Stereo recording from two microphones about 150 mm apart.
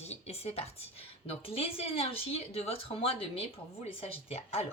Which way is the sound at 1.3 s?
40° left (ahead or behind).